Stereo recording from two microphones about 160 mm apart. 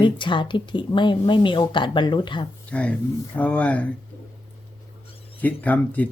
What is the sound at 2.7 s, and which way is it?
Speech, 10° left (ahead or behind).